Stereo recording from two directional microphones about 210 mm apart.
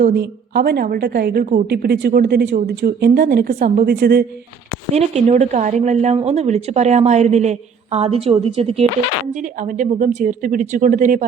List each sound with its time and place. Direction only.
0.0 s a woman's voice: 45° right (ahead or behind)
4.9 s speech: 30° right (ahead or behind)